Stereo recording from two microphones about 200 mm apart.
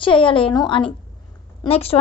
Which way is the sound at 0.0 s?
25° left (ahead or behind).